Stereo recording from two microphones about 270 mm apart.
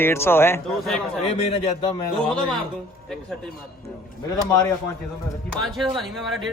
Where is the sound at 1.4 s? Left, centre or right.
Left.